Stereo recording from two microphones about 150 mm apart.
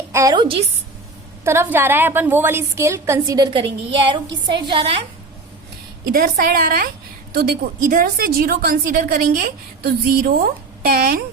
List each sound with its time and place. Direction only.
0.1 s a woman's voice: 20° right (ahead or behind)
0.3 s a woman's voice: 35° right (ahead or behind)
1.5 s a woman's voice: 15° right (ahead or behind); by 4.9 s 35° right (ahead or behind)
6.1 s a woman's voice: 75° right (ahead or behind)
7.3 s a woman's voice: 90° right; by 11.2 s 70° right (ahead or behind)